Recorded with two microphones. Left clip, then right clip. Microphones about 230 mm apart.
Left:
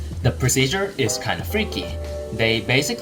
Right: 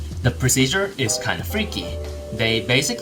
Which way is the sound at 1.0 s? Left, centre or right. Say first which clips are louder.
Even; centre.